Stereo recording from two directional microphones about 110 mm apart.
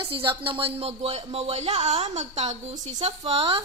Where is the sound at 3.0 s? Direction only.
60° right (ahead or behind).